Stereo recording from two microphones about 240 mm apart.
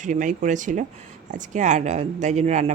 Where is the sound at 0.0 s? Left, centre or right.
Right.